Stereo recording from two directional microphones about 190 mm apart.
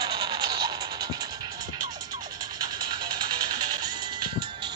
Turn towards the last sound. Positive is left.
turn(degrees=-25)  # may be behind; listen again after turning